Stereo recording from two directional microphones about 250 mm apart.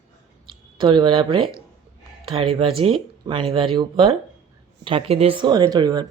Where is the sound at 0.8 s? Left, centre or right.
Centre.